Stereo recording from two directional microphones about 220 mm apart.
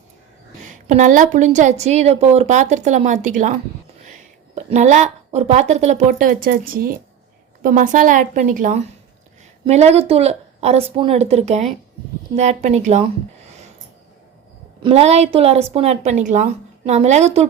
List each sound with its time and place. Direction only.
0.7 s a woman's voice: 35° right (ahead or behind)
4.5 s a woman's voice: 30° right (ahead or behind)
14.8 s a woman's voice: 25° right (ahead or behind)